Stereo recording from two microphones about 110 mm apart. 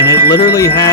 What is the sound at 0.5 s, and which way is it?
Speech, 30° left (ahead or behind).